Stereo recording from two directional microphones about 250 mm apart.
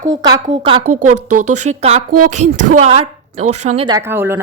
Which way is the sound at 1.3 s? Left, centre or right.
Right.